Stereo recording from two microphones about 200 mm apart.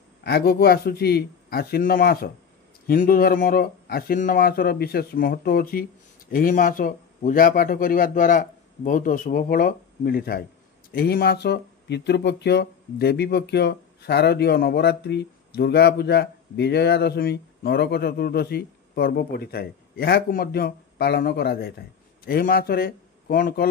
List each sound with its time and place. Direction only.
0.2 s speech: 55° left (ahead or behind)